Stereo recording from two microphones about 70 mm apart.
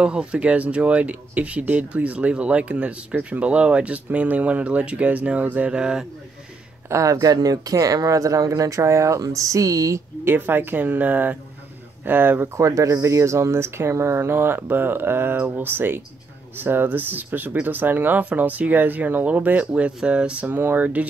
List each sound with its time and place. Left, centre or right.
0.0 s speech: centre
6.9 s speech: right
10.2 s speech: right
12.5 s speech: right